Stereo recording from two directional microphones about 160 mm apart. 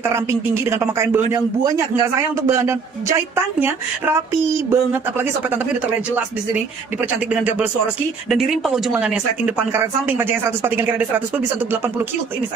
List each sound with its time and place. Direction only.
0.1 s a man's voice: 15° right (ahead or behind)